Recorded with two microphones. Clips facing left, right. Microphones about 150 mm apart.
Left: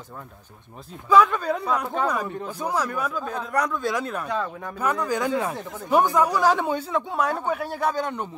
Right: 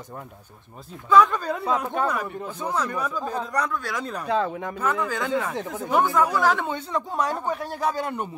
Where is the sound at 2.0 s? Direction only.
15° left (ahead or behind).